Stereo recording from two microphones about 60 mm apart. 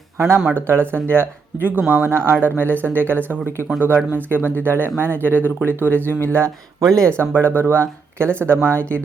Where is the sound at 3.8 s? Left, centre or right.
Right.